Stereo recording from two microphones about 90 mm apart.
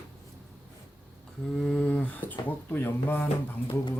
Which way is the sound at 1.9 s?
20° left (ahead or behind).